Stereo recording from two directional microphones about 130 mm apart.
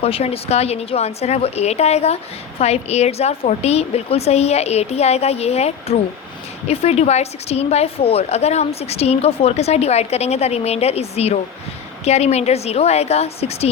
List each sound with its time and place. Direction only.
0.0 s a woman's voice: 50° left (ahead or behind)